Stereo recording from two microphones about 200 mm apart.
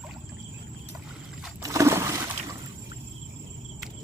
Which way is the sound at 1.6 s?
15° right (ahead or behind).